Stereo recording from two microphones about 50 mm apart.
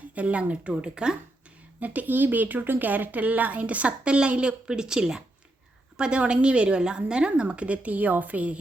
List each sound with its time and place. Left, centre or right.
0.1 s a woman's voice: right
1.8 s a woman's voice: right